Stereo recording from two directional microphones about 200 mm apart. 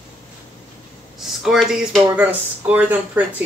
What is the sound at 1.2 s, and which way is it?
Speech, centre (ahead or behind).